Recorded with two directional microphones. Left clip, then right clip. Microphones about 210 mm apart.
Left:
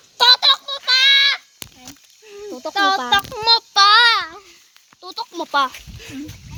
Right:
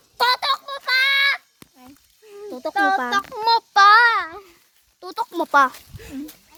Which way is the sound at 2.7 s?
45° left (ahead or behind).